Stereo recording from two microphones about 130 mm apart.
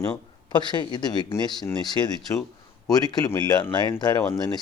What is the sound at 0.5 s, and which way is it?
A woman's voice, 35° left (ahead or behind).